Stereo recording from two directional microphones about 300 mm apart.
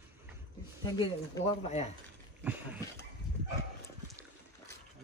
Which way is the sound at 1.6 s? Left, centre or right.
Left.